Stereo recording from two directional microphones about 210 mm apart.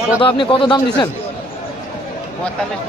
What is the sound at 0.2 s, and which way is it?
Speech, 25° left (ahead or behind).